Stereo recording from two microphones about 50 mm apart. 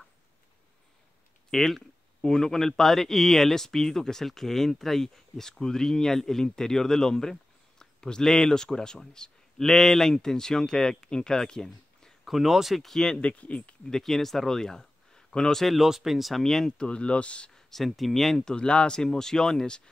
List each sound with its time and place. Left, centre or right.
1.5 s speech: centre
12.3 s speech: centre
13.2 s speech: left
13.8 s speech: centre
15.6 s speech: centre
16.7 s speech: centre
17.6 s speech: centre
18.4 s speech: centre